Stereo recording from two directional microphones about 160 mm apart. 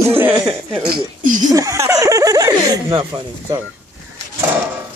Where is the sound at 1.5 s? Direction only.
20° right (ahead or behind).